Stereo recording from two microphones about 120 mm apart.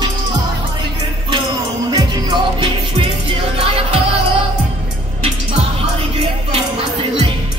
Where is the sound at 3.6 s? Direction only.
55° right (ahead or behind).